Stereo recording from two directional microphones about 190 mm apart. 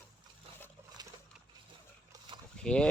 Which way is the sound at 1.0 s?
20° right (ahead or behind).